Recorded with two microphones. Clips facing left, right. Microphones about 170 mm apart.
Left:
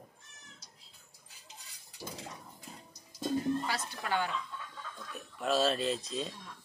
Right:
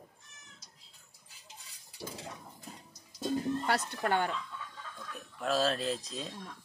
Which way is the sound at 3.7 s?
50° right (ahead or behind).